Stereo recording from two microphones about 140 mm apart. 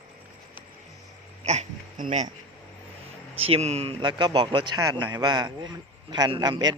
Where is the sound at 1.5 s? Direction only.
55° right (ahead or behind).